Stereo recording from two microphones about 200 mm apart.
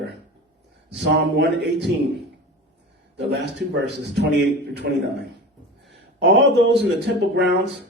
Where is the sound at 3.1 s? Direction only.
55° right (ahead or behind).